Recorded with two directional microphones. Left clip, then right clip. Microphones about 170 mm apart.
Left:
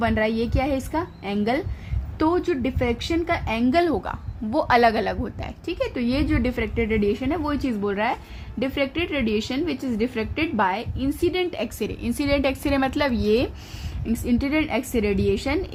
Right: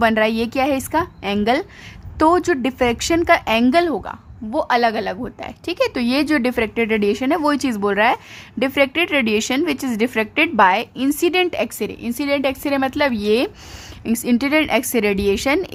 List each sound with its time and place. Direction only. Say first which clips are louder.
0.0 s a woman's voice: right 6 dB; 25° right (ahead or behind)
2.1 s a woman's voice: right 7 dB; 35° right (ahead or behind)